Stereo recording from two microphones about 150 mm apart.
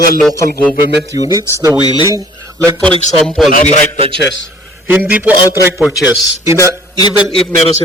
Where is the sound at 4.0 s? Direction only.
40° right (ahead or behind).